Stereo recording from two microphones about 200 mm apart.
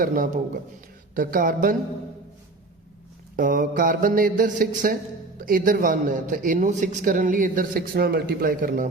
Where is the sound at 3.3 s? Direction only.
40° right (ahead or behind).